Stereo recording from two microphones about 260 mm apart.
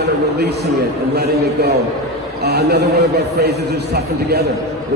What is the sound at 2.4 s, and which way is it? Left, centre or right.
A man's voice, right.